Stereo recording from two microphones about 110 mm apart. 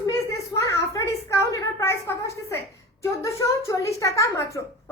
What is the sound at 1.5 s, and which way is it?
A woman's voice, 25° left (ahead or behind).